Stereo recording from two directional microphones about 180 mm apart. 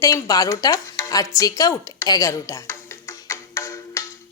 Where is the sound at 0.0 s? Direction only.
20° left (ahead or behind).